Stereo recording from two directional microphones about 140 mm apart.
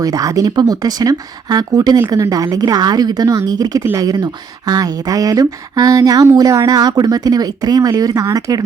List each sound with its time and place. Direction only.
0.0 s speech: 25° right (ahead or behind)